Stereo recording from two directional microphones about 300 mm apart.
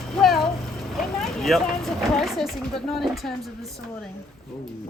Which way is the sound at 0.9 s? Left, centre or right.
Centre.